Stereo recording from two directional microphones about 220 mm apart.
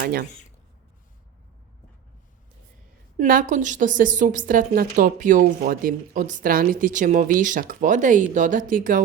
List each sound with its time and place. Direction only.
0.0 s speech: 45° right (ahead or behind)
3.2 s a woman's voice: 35° right (ahead or behind)